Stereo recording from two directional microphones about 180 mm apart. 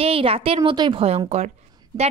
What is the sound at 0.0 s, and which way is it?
A woman's voice, 30° right (ahead or behind).